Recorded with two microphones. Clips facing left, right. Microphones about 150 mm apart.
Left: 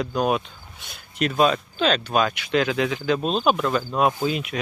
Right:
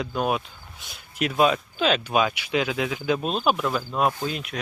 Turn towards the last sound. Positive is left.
turn(degrees=0)  # may be behind; listen again after turning